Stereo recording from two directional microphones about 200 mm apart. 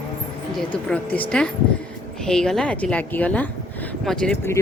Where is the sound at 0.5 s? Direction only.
5° left (ahead or behind).